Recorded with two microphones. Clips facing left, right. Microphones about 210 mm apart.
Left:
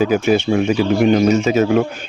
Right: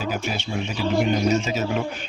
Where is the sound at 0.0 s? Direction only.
55° left (ahead or behind).